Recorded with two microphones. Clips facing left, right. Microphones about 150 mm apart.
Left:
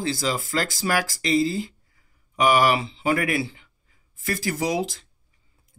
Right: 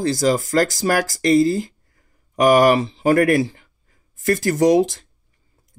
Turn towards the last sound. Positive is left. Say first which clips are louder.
# right 10 dB
turn(degrees=-45)  # may be behind; listen again after turning